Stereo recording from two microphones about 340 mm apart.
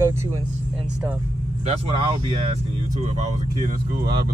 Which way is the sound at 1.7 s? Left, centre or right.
Centre.